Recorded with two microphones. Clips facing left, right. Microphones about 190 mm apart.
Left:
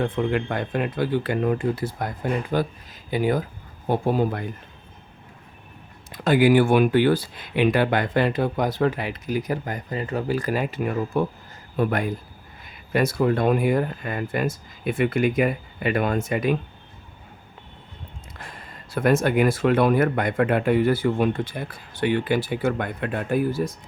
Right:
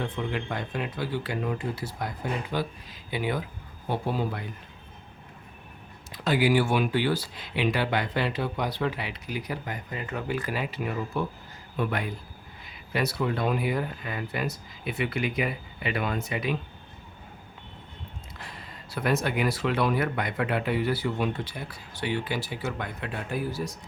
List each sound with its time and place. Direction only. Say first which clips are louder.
0.0 s speech: left 8 dB; 55° left (ahead or behind)
6.1 s speech: left 6 dB; 50° left (ahead or behind)
18.3 s speech: left 3 dB; 50° left (ahead or behind)